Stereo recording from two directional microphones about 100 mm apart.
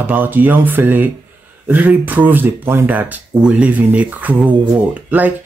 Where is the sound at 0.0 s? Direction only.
20° right (ahead or behind).